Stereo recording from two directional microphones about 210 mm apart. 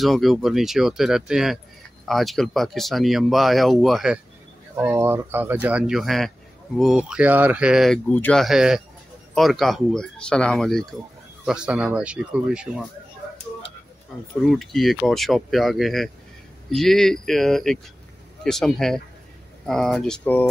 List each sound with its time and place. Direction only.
0.0 s speech: centre (ahead or behind)
14.5 s speech: centre (ahead or behind)